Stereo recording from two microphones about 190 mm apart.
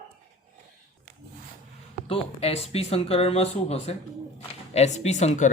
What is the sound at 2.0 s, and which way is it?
Speech, 30° left (ahead or behind).